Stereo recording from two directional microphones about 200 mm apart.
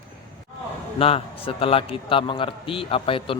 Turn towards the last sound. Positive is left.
turn(degrees=25)  # may be behind; listen again after turning